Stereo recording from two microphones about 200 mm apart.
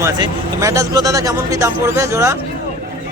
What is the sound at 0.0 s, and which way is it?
A man's voice, 15° right (ahead or behind).